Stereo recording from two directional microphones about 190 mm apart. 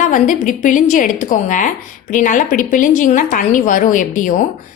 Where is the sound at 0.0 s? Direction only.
45° left (ahead or behind).